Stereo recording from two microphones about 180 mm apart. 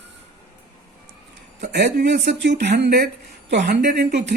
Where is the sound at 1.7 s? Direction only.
70° right (ahead or behind).